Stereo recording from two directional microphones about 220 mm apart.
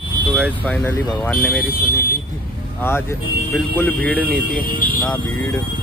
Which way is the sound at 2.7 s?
10° left (ahead or behind).